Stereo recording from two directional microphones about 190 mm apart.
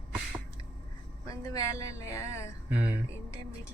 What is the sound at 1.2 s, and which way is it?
Speech, 20° left (ahead or behind).